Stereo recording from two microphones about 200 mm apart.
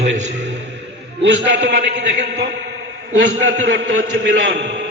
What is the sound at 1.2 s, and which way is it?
A man's voice, 65° right (ahead or behind).